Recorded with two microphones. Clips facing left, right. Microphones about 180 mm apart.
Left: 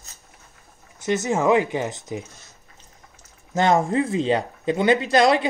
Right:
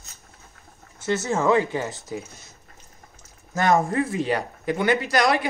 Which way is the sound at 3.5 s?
20° left (ahead or behind).